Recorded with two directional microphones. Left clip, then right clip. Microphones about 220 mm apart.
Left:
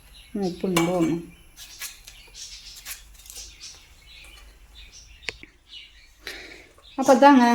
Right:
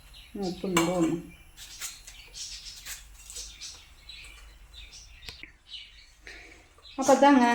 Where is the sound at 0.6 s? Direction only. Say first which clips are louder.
Left 3 dB; 55° left (ahead or behind).